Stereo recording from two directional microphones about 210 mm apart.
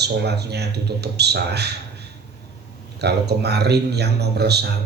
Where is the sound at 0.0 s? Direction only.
50° right (ahead or behind).